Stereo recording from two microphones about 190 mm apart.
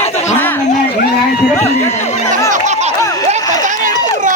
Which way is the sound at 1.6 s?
35° left (ahead or behind).